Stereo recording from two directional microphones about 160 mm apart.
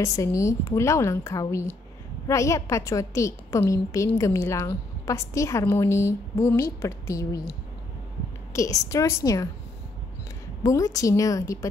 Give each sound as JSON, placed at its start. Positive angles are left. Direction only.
{"t": 0.0, "sound": "a woman's voice", "side_deg": 20}
{"t": 8.5, "sound": "a woman's voice", "side_deg": 20}
{"t": 10.6, "sound": "a woman's voice", "side_deg": 20}